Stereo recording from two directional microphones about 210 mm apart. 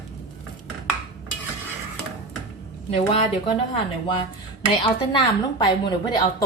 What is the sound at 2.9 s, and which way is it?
A woman's voice, 30° left (ahead or behind).